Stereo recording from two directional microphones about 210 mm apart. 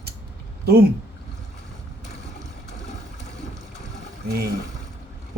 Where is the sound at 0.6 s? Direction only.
50° right (ahead or behind).